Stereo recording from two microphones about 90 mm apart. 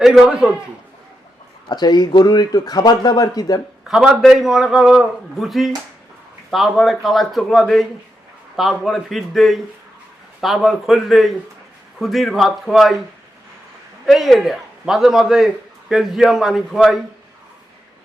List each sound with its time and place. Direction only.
0.0 s a man's voice: 5° right (ahead or behind)
1.6 s speech: 50° left (ahead or behind)
3.8 s a man's voice: 5° right (ahead or behind)
14.1 s a man's voice: centre (ahead or behind)